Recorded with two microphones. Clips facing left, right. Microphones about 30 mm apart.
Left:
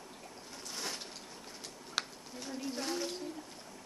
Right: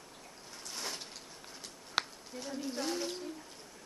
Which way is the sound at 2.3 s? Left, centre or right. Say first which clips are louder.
Right 1 dB; centre.